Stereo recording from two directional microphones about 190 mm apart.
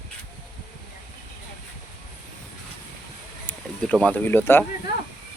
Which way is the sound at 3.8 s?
5° left (ahead or behind).